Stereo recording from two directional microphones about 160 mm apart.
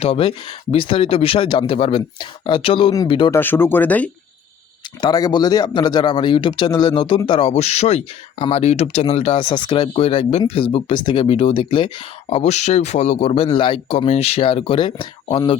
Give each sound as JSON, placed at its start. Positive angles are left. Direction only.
{"t": 0.0, "sound": "speech", "side_deg": 35}
{"t": 3.3, "sound": "speech", "side_deg": 15}
{"t": 4.9, "sound": "speech", "side_deg": 25}
{"t": 12.3, "sound": "speech", "side_deg": 45}